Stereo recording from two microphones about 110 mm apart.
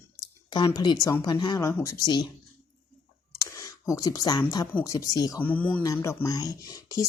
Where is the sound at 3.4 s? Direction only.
30° left (ahead or behind).